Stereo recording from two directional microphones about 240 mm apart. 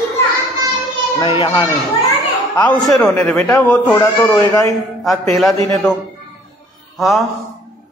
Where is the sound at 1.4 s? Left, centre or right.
Left.